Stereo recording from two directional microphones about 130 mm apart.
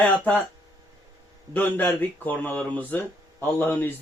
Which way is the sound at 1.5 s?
15° left (ahead or behind).